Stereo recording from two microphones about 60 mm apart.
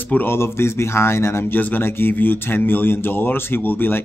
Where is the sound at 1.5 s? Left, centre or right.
Left.